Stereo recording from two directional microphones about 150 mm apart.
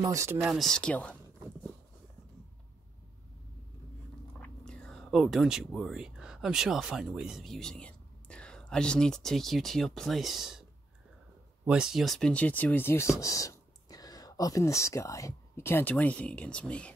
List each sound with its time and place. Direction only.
0.0 s speech: 20° right (ahead or behind)
0.4 s speech: centre (ahead or behind)
4.4 s speech: 5° left (ahead or behind)
11.6 s speech: 5° right (ahead or behind)